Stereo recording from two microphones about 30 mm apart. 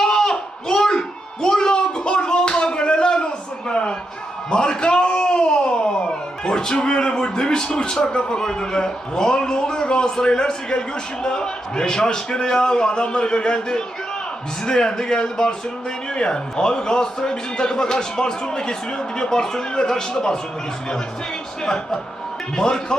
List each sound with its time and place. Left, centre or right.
0.0 s a sound: centre
8.4 s a man's voice: left
9.8 s a man's voice: left
22.5 s a man's voice: left